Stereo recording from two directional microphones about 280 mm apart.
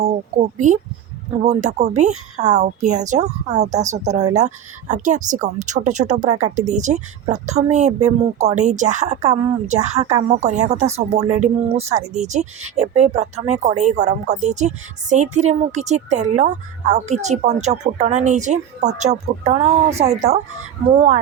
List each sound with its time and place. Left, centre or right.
0.3 s a woman's voice: right